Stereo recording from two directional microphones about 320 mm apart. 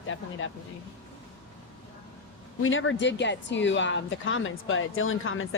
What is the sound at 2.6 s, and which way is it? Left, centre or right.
A woman's voice, left.